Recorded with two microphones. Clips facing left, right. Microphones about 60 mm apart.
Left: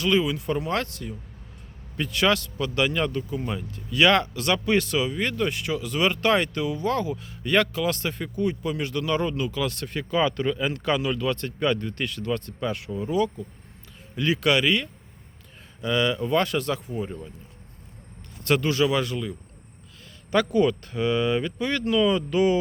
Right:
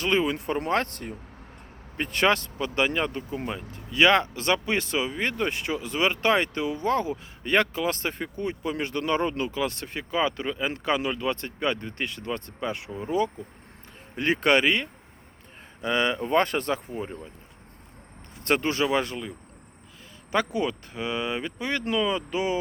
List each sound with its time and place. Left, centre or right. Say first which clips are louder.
0.0 s speech: left 1 dB; right
18.4 s speech: left 2 dB; right
20.3 s speech: left 5 dB; centre